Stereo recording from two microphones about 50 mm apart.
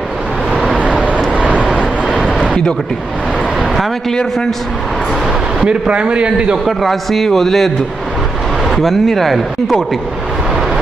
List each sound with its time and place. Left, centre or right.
5.6 s a man's voice: centre
6.6 s speech: centre
8.7 s speech: centre